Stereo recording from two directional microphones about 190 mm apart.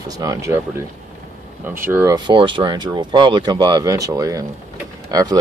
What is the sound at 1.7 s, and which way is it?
Speech, 10° right (ahead or behind).